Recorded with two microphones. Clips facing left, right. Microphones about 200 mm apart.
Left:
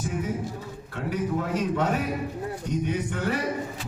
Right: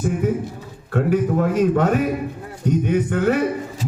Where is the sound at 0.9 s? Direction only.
50° right (ahead or behind).